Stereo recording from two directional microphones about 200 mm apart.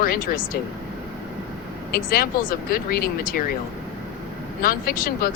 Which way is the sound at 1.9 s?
45° left (ahead or behind).